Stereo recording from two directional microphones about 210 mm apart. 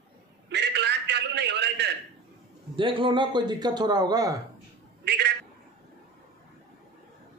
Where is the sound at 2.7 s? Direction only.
25° right (ahead or behind).